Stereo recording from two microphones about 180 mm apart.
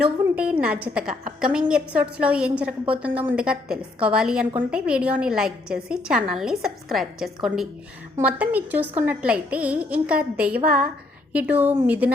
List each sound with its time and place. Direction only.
0.0 s a woman's voice: 5° right (ahead or behind)